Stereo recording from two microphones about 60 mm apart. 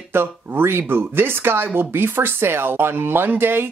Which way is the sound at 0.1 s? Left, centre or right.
Right.